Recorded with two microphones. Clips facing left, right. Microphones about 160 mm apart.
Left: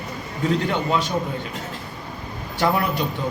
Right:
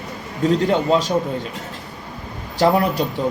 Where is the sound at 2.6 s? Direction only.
40° right (ahead or behind).